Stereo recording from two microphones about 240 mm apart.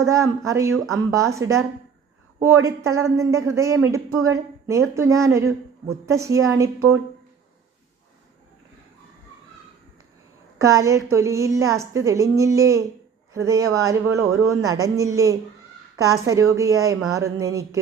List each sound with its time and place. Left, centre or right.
0.0 s a woman's voice: centre
10.6 s a woman's voice: centre